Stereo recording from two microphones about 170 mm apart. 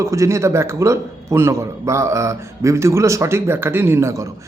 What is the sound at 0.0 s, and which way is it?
A man's voice, 20° right (ahead or behind).